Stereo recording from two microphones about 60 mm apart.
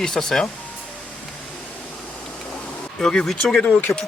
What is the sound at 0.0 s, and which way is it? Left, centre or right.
Speech, centre.